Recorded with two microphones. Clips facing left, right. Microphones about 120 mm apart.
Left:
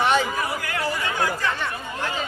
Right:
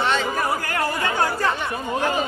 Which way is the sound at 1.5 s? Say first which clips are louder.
Right 3 dB; 15° right (ahead or behind).